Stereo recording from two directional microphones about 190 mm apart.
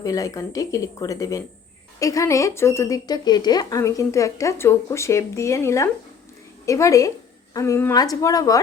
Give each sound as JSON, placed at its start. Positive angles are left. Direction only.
{"t": 0.0, "sound": "a woman's voice", "side_deg": 15}